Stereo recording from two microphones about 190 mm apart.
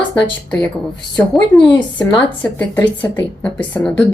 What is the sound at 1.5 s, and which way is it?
Speech, centre (ahead or behind).